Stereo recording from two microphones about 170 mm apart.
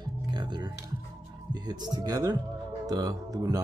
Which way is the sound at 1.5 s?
25° right (ahead or behind).